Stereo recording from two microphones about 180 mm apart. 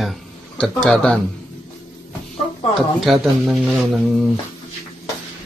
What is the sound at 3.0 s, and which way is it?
Speech, centre (ahead or behind).